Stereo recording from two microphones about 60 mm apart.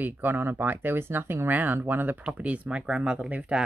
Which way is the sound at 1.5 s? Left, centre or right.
Right.